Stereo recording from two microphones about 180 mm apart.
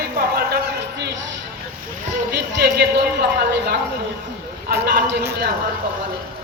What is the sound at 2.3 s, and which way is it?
Speech, 60° right (ahead or behind).